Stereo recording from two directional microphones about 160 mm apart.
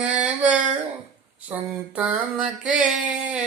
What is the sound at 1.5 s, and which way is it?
Female singing, 10° right (ahead or behind).